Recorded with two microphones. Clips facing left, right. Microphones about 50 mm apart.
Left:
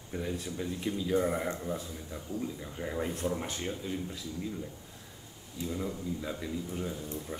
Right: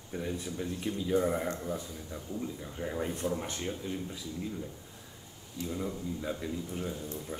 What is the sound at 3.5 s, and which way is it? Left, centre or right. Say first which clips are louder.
Speech: even; centre.